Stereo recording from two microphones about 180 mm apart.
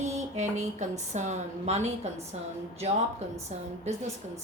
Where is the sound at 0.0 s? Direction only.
40° right (ahead or behind).